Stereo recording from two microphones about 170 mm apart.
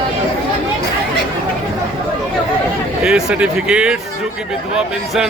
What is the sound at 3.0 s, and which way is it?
Speech, 5° right (ahead or behind).